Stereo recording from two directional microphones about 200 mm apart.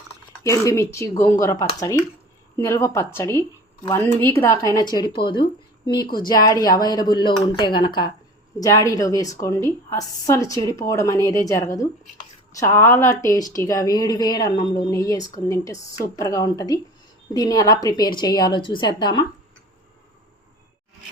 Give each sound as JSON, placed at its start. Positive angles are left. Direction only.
{"t": 0.4, "sound": "a woman's voice", "side_deg": 15}